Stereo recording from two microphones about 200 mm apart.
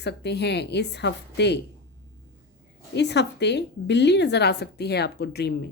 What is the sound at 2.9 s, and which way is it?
Speech, 60° left (ahead or behind).